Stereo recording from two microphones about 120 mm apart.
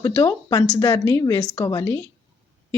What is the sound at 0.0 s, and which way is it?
Speech, 30° left (ahead or behind).